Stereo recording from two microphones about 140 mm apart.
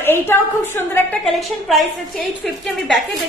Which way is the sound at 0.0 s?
15° left (ahead or behind).